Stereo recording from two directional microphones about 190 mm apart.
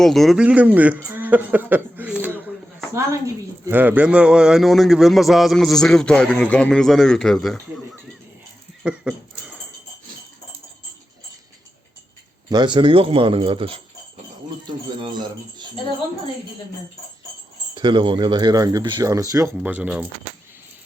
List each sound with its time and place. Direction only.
0.0 s speech: centre (ahead or behind)
3.7 s a man's voice: 10° right (ahead or behind)
8.8 s dog: 5° right (ahead or behind)
12.5 s speech: 25° right (ahead or behind)
14.9 s speech: 25° right (ahead or behind)
17.7 s speech: 25° right (ahead or behind); by 20.1 s 10° right (ahead or behind)